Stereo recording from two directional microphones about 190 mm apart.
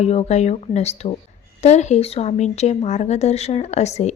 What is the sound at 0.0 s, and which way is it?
Speech, 35° left (ahead or behind).